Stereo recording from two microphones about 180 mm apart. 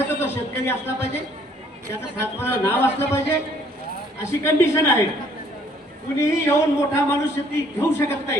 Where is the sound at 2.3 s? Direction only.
15° left (ahead or behind).